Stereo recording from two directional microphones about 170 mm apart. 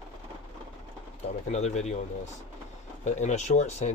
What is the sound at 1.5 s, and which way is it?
Speech, 40° left (ahead or behind).